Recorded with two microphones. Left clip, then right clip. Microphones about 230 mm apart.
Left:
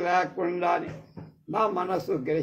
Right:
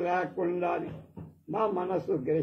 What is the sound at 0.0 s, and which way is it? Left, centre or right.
Mantra, left.